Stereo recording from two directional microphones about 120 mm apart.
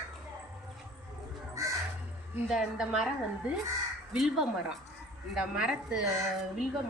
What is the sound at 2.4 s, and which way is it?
Speech, centre (ahead or behind).